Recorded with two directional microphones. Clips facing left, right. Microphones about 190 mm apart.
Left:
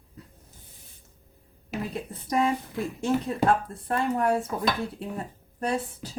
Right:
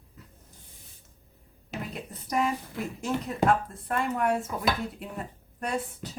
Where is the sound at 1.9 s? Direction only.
30° left (ahead or behind).